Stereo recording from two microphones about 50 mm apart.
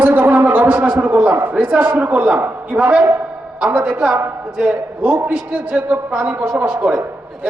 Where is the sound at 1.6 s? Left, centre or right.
Right.